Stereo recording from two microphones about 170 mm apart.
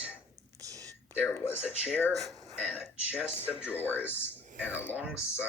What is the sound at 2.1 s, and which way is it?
Speech, centre (ahead or behind).